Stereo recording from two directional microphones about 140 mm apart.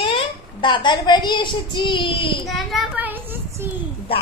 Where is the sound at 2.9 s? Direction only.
15° right (ahead or behind).